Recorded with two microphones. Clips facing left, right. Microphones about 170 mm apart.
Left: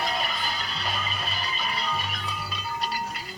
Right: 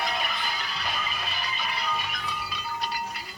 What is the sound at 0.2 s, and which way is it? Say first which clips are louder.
Music: left 1 dB; 30° left (ahead or behind).